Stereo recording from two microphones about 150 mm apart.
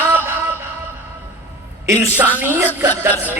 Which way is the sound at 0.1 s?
15° right (ahead or behind).